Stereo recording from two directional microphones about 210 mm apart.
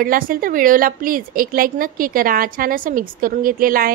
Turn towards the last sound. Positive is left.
turn(degrees=-45)  # may be behind; listen again after turning